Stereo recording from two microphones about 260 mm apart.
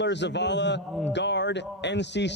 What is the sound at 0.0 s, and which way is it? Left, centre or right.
A man's voice, left.